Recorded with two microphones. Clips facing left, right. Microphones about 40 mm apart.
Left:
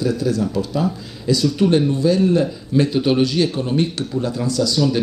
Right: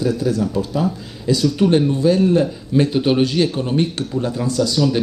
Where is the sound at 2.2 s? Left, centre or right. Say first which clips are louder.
Right 1 dB; centre.